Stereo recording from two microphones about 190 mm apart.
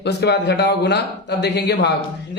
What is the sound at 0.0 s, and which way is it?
Speech, 60° left (ahead or behind).